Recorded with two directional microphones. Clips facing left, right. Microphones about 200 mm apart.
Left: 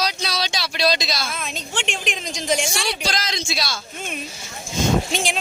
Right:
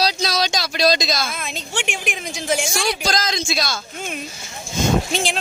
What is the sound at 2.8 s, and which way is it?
Speech, 45° right (ahead or behind).